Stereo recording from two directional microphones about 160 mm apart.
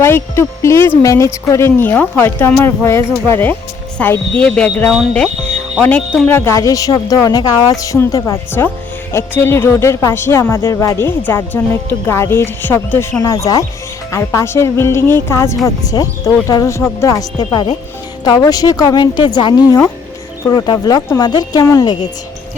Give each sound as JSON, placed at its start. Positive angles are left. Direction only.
{"t": 0.0, "sound": "speech", "side_deg": 15}